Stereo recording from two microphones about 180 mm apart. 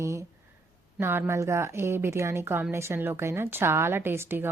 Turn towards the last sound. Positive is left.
turn(degrees=-10)  # may be behind; listen again after turning